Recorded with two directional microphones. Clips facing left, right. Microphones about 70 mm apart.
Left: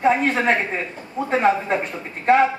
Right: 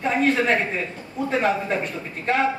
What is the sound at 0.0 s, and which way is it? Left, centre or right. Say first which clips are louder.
A woman's voice: left 2 dB; left.